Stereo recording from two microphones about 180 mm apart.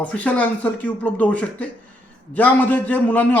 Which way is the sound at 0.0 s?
10° left (ahead or behind).